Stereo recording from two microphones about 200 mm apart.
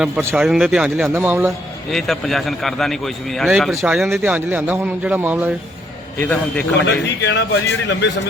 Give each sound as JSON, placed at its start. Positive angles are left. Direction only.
{"t": 0.0, "sound": "a man's voice", "side_deg": -10}
{"t": 1.9, "sound": "a man's voice", "side_deg": 0}
{"t": 6.1, "sound": "a man's voice", "side_deg": 10}
{"t": 6.8, "sound": "a man's voice", "side_deg": 60}